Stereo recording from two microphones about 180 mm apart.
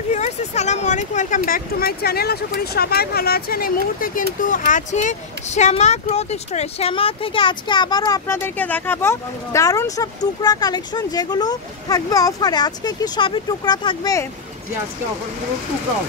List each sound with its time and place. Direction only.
0.1 s speech: 40° left (ahead or behind); by 14.2 s 20° left (ahead or behind)